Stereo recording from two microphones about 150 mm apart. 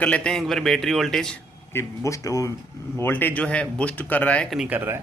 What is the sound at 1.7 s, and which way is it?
A man's voice, 20° left (ahead or behind).